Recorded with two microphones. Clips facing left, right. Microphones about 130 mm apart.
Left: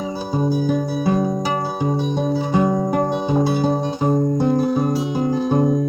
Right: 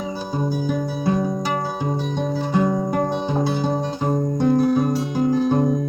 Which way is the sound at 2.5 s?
5° left (ahead or behind).